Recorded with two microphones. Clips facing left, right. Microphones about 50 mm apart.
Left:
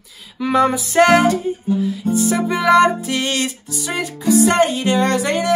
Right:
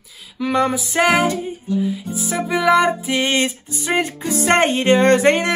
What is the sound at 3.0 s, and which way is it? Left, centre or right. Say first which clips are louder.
Music: right 2 dB; centre.